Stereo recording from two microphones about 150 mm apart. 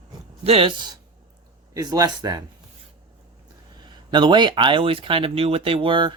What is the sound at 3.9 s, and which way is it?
Speech, 30° right (ahead or behind).